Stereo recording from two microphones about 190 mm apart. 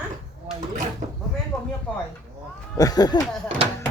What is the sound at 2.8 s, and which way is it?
Speech, 20° left (ahead or behind).